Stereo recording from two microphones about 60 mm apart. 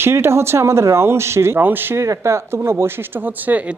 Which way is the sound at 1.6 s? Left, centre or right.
Right.